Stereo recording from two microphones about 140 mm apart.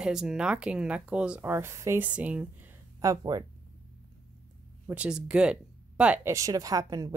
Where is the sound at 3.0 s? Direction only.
25° right (ahead or behind).